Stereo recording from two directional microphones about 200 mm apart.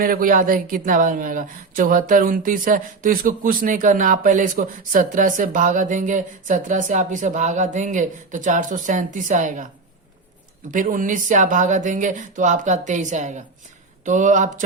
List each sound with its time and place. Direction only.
0.0 s speech: 45° right (ahead or behind)
10.7 s speech: 40° right (ahead or behind)